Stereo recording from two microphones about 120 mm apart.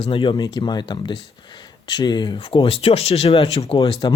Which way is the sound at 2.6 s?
50° left (ahead or behind).